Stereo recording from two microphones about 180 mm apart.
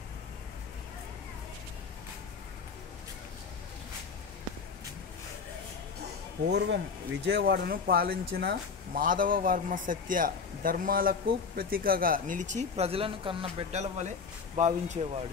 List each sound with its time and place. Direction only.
6.4 s speech: 70° right (ahead or behind); by 15.1 s 40° right (ahead or behind)